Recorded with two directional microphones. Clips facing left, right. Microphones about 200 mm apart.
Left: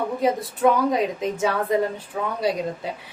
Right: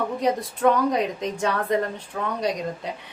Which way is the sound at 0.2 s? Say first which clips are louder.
Left 2 dB; 5° left (ahead or behind).